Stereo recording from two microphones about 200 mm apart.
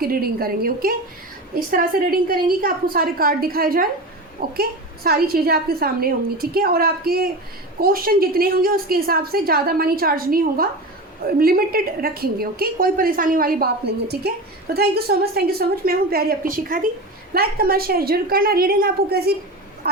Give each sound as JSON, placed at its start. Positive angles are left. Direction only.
{"t": 0.0, "sound": "a woman's voice", "side_deg": -50}